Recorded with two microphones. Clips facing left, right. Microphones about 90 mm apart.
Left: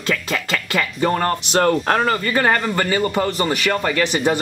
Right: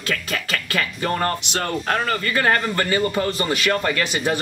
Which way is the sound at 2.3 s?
20° left (ahead or behind).